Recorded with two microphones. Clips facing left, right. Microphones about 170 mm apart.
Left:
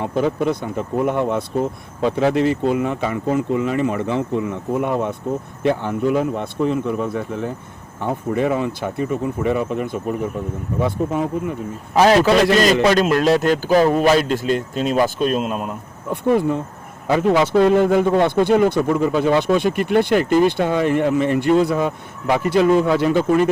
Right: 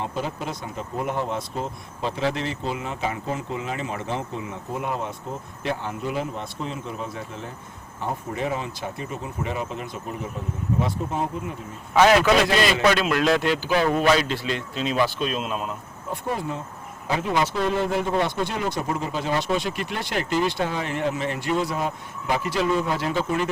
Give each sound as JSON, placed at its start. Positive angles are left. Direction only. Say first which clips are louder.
{"t": 0.0, "sound": "speech", "louder": "left 10 dB", "side_deg": 55}
{"t": 11.9, "sound": "a man's voice", "louder": "left 4 dB", "side_deg": 35}